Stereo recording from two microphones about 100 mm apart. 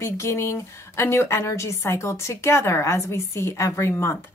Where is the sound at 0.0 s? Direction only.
25° left (ahead or behind).